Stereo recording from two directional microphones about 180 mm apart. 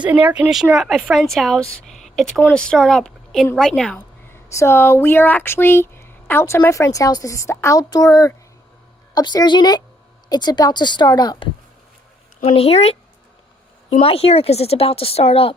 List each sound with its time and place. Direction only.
0.0 s speech: 10° right (ahead or behind)
4.3 s a woman's voice: 15° left (ahead or behind)
12.4 s speech: 35° left (ahead or behind)
14.0 s speech: 35° left (ahead or behind)